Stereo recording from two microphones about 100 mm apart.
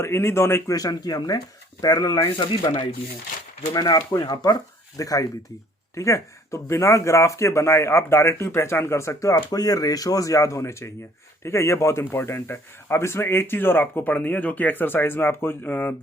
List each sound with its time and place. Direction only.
0.0 s speech: 25° left (ahead or behind)
0.8 s speech: 40° left (ahead or behind)
2.1 s speech: 60° left (ahead or behind)
3.7 s speech: 40° left (ahead or behind); by 16.0 s 20° left (ahead or behind)